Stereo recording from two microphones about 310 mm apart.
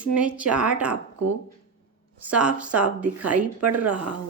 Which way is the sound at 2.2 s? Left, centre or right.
Centre.